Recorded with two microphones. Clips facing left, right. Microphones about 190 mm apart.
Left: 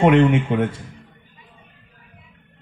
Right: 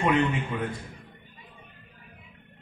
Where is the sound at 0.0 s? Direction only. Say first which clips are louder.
Left 10 dB; 90° left.